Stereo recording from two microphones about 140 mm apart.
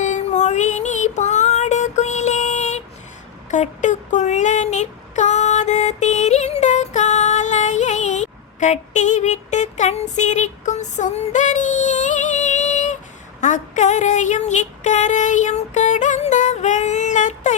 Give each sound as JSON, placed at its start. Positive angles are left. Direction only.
{"t": 0.0, "sound": "female singing", "side_deg": 55}
{"t": 3.5, "sound": "child singing", "side_deg": 60}
{"t": 13.4, "sound": "a sound", "side_deg": 60}